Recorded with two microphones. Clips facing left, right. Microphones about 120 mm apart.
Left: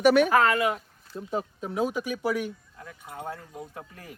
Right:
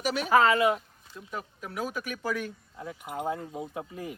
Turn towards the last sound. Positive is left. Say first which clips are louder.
# right 6 dB
turn(degrees=-5)  # may be behind; listen again after turning